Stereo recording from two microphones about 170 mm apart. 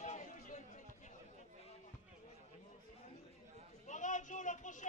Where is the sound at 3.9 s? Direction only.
45° left (ahead or behind).